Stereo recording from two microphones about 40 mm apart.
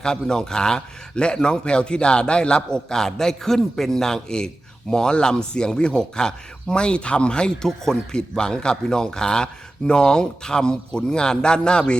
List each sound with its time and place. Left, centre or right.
0.0 s a man's voice: centre